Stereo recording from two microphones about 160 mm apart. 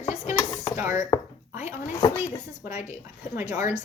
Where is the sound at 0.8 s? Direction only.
20° right (ahead or behind).